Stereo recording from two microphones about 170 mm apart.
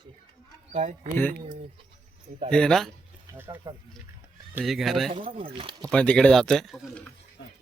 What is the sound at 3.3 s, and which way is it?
Speech, 15° right (ahead or behind).